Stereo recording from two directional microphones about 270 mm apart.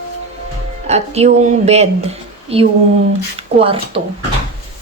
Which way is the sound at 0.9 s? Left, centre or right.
Right.